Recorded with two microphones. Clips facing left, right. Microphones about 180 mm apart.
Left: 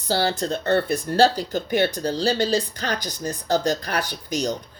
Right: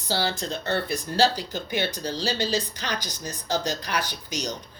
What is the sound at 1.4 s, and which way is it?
Speech, 45° left (ahead or behind).